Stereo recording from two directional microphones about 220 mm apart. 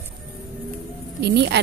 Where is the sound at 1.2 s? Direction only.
50° right (ahead or behind).